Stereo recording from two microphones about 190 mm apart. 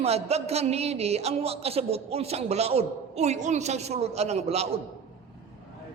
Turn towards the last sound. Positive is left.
turn(degrees=-35)  # may be behind; listen again after turning